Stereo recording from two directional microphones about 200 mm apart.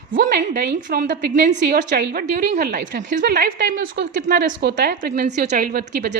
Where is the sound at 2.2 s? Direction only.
40° right (ahead or behind).